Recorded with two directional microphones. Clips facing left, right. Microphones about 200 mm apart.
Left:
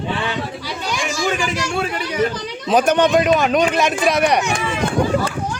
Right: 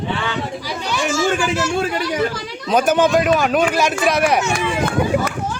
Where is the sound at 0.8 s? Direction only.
15° left (ahead or behind).